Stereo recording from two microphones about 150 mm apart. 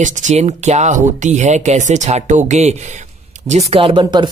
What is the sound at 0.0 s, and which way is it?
Speech, 50° right (ahead or behind).